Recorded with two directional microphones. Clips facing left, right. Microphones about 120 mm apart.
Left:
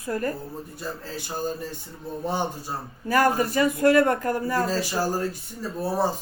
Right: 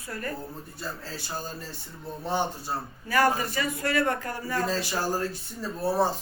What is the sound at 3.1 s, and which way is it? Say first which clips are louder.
Speech: left 3 dB; 45° left (ahead or behind).